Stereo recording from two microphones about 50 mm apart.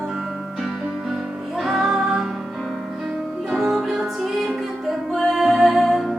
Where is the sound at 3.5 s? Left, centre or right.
Centre.